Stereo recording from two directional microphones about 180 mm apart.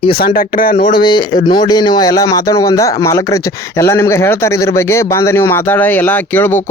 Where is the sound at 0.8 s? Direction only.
25° left (ahead or behind).